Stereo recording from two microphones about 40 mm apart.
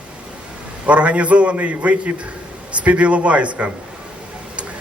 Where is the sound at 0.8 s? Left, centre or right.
Right.